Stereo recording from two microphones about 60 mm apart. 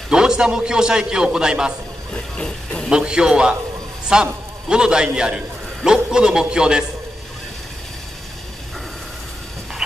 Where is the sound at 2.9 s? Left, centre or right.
Centre.